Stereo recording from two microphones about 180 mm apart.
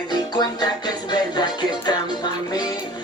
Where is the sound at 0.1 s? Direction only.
20° left (ahead or behind).